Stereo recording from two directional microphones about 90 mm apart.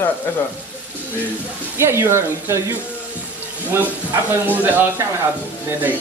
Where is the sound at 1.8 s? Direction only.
25° right (ahead or behind).